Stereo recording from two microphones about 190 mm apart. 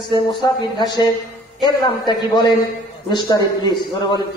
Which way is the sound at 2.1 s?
25° left (ahead or behind).